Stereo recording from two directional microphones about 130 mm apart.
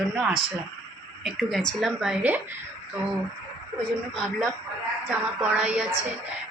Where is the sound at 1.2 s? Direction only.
Centre (ahead or behind).